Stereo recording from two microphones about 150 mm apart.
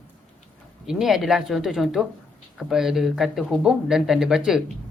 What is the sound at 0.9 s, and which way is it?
Speech, 5° right (ahead or behind).